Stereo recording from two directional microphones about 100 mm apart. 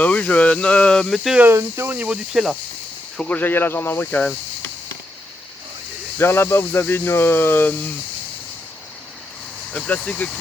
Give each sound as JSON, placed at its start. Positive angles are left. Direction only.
{"t": 0.0, "sound": "speech", "side_deg": 15}
{"t": 1.4, "sound": "speech", "side_deg": -25}
{"t": 2.3, "sound": "speech", "side_deg": -5}
{"t": 3.2, "sound": "speech", "side_deg": 15}
{"t": 6.1, "sound": "speech", "side_deg": 25}
{"t": 9.7, "sound": "speech", "side_deg": 15}